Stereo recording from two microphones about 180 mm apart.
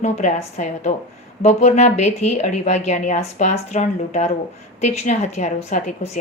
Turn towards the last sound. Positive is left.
turn(degrees=40)  # may be behind; listen again after turning